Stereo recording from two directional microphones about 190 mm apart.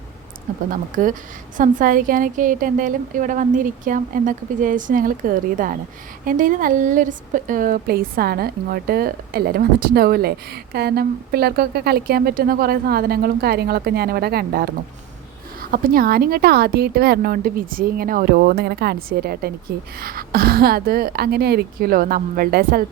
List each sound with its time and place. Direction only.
0.7 s a woman's voice: 45° right (ahead or behind)
15.7 s a woman's voice: 50° right (ahead or behind)